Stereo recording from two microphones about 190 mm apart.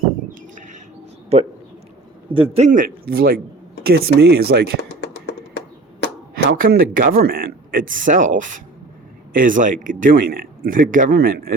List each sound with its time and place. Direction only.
1.3 s a man's voice: 35° right (ahead or behind); by 4.7 s 60° right (ahead or behind)
4.9 s a sound: 65° left (ahead or behind)
6.6 s speech: 50° right (ahead or behind)